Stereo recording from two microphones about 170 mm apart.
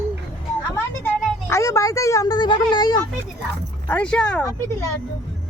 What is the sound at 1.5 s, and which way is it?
Speech, 15° left (ahead or behind).